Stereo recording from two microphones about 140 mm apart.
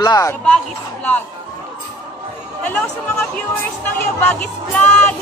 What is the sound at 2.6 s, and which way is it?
Speech, 10° left (ahead or behind).